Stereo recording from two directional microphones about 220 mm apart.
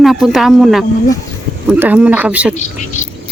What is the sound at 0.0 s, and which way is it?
Speech, centre (ahead or behind).